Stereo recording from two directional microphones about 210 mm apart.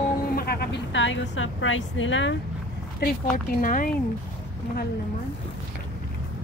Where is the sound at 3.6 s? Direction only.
40° left (ahead or behind).